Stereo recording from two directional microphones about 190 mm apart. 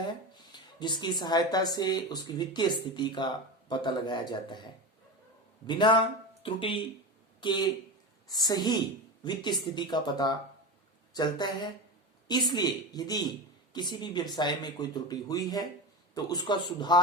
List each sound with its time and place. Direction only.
0.5 s speech: 25° left (ahead or behind)